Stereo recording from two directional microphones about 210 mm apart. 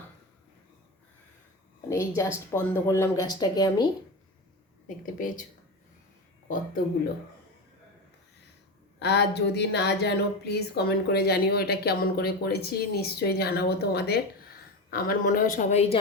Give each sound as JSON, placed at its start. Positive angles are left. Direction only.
{"t": 1.9, "sound": "speech", "side_deg": 15}
{"t": 5.0, "sound": "a woman's voice", "side_deg": 40}
{"t": 9.0, "sound": "a woman's voice", "side_deg": 50}